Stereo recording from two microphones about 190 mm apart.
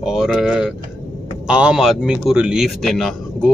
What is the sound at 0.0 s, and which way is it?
A man's voice, 5° right (ahead or behind).